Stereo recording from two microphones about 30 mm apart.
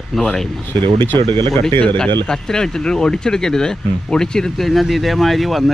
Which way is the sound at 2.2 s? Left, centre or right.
Left.